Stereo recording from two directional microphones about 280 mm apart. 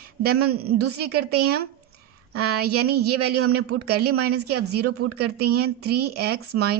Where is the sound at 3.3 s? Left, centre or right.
Right.